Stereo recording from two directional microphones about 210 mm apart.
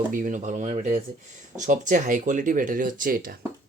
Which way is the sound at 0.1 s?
40° right (ahead or behind).